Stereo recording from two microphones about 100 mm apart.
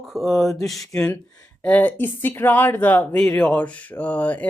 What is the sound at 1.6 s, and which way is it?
Speech, 15° left (ahead or behind).